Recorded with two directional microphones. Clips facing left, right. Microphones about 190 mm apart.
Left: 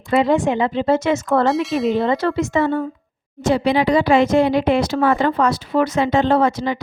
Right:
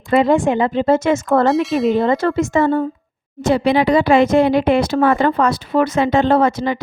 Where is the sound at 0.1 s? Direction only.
50° right (ahead or behind).